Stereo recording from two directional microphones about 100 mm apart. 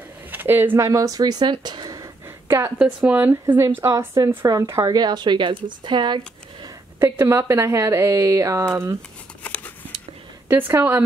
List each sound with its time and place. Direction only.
0.3 s a sound: 20° right (ahead or behind)
0.8 s speech: 35° right (ahead or behind)
2.8 s speech: 15° right (ahead or behind)
3.8 s a woman's voice: 35° right (ahead or behind)
4.9 s speech: 45° right (ahead or behind)
5.9 s a sound: 50° right (ahead or behind)
7.0 s speech: 25° right (ahead or behind)
10.5 s speech: 25° right (ahead or behind)